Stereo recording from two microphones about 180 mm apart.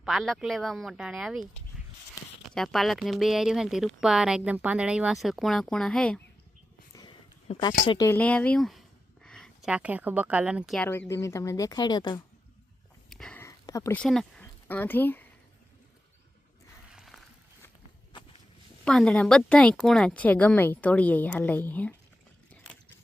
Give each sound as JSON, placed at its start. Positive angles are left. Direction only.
{"t": 0.0, "sound": "speech", "side_deg": 0}
{"t": 2.6, "sound": "speech", "side_deg": 0}
{"t": 6.9, "sound": "a sound", "side_deg": 20}
{"t": 7.4, "sound": "speech", "side_deg": 30}
{"t": 8.0, "sound": "a woman's voice", "side_deg": 10}
{"t": 10.8, "sound": "a woman's voice", "side_deg": 10}
{"t": 13.1, "sound": "sniff", "side_deg": 5}
{"t": 13.4, "sound": "a sound", "side_deg": 15}
{"t": 14.0, "sound": "speech", "side_deg": 5}
{"t": 16.9, "sound": "a sound", "side_deg": 0}
{"t": 18.9, "sound": "a woman's voice", "side_deg": 5}